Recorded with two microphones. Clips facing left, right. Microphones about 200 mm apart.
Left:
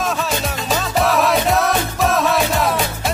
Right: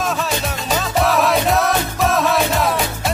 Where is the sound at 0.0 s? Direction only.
Centre (ahead or behind).